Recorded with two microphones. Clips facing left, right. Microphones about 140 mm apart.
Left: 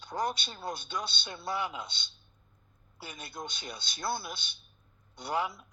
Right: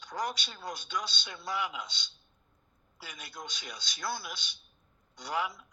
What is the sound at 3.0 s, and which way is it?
A man's voice, 30° left (ahead or behind).